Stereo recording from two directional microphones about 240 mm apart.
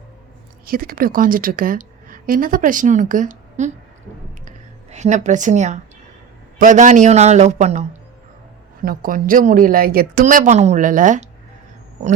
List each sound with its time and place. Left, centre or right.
0.6 s a woman's voice: right